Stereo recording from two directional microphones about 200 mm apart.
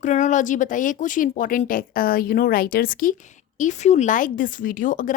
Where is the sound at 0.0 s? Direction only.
35° left (ahead or behind).